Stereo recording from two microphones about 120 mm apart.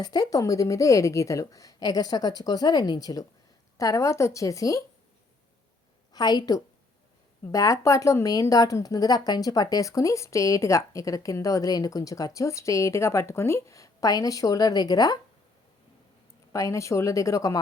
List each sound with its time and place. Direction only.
0.0 s a woman's voice: 35° left (ahead or behind)
6.1 s a woman's voice: 35° left (ahead or behind)
16.5 s a woman's voice: 25° left (ahead or behind)